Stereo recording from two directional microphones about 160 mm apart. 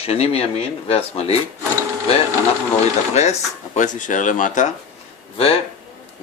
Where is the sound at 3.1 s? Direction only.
45° left (ahead or behind).